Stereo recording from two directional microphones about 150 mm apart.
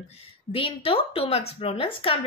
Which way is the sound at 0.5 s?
35° left (ahead or behind).